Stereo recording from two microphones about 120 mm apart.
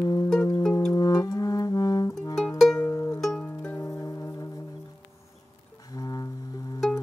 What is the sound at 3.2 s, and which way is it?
Music, 5° left (ahead or behind).